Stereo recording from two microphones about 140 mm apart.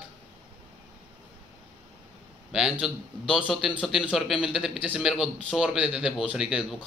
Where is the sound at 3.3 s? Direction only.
35° left (ahead or behind).